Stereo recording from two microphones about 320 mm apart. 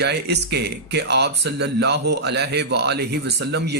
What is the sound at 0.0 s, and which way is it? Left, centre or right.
Speech, right.